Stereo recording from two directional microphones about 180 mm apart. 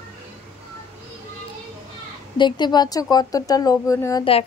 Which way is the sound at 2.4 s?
25° left (ahead or behind).